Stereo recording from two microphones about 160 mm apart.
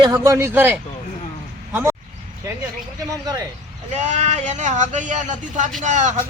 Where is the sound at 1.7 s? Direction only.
15° right (ahead or behind).